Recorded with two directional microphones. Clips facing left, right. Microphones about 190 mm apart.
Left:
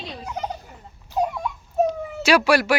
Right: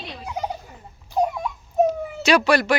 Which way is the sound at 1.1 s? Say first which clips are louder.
Right 2 dB; 15° right (ahead or behind).